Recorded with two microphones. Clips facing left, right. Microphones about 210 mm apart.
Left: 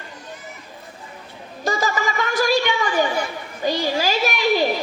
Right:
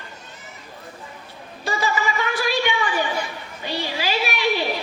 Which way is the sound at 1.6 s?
40° left (ahead or behind).